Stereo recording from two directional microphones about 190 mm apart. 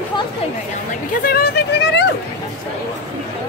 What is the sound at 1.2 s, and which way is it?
Speech, 50° left (ahead or behind).